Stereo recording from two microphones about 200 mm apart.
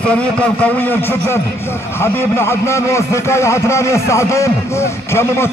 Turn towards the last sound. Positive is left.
turn(degrees=10)  # may be behind; listen again after turning